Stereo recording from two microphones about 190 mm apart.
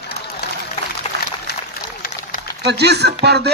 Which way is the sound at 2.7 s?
60° right (ahead or behind).